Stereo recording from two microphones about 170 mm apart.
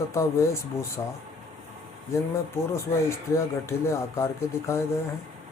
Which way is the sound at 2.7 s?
15° left (ahead or behind).